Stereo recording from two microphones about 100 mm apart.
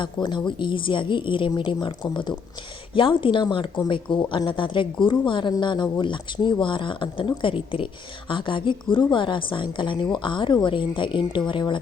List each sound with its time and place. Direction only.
0.0 s a woman's voice: 50° left (ahead or behind)